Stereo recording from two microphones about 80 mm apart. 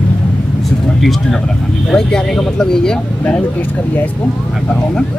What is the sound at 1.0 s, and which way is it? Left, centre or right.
Speech, centre.